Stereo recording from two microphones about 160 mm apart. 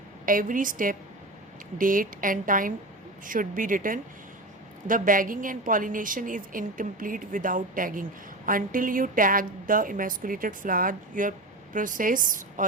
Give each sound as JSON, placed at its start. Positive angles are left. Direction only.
{"t": 0.3, "sound": "a woman's voice", "side_deg": -60}